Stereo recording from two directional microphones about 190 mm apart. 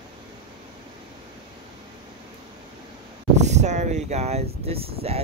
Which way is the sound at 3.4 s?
35° right (ahead or behind).